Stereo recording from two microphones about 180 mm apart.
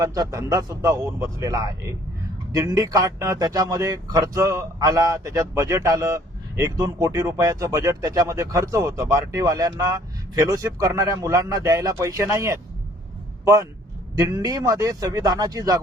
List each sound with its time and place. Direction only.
0.0 s a man's voice: 20° right (ahead or behind)